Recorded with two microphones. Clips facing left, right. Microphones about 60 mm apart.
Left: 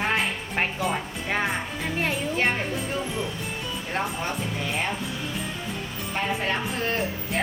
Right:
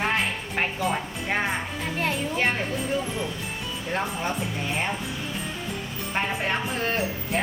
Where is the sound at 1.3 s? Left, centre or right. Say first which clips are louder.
Even; centre.